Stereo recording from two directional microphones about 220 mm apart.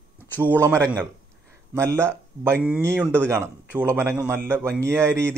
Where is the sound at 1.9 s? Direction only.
10° right (ahead or behind).